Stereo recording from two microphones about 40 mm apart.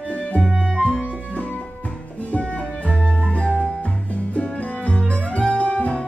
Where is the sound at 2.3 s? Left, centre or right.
Left.